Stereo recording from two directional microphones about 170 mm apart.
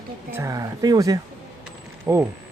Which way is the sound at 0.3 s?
15° right (ahead or behind).